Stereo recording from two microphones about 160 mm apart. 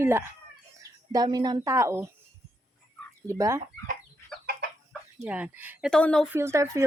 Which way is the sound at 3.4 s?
20° right (ahead or behind).